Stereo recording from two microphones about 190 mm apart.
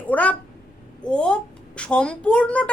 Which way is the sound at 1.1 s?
5° left (ahead or behind).